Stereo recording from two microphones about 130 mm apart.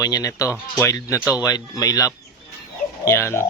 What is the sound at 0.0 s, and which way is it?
Speech, 25° left (ahead or behind).